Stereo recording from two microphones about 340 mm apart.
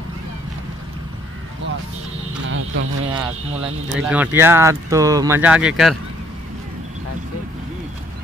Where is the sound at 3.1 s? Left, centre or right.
Centre.